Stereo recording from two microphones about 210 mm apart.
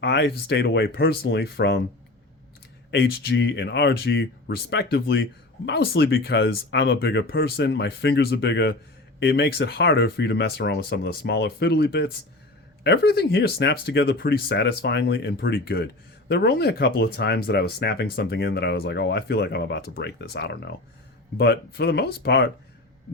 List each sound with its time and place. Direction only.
0.0 s speech: 55° left (ahead or behind)
2.9 s speech: 50° left (ahead or behind)